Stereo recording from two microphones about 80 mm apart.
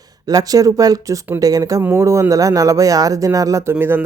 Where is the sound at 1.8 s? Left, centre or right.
Right.